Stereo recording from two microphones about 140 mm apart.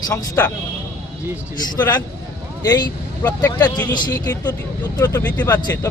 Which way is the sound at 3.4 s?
30° left (ahead or behind).